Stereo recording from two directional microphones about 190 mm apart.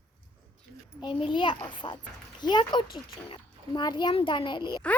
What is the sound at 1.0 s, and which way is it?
A child's voice, 25° left (ahead or behind).